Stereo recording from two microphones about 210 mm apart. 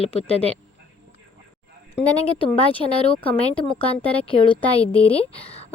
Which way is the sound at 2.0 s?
25° left (ahead or behind).